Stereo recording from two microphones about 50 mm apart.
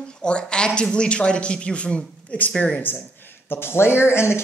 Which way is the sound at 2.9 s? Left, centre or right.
Left.